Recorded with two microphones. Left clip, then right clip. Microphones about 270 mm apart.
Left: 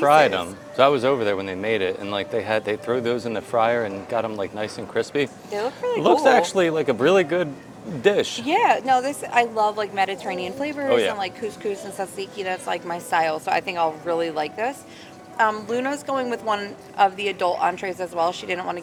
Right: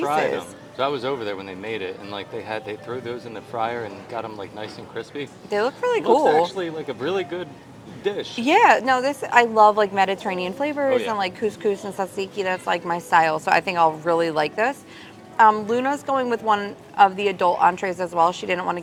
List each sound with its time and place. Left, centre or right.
0.0 s a man's voice: left
5.5 s speech: right
6.0 s speech: left
8.4 s a woman's voice: right
10.8 s speech: left
11.1 s a woman's voice: right
15.4 s a woman's voice: right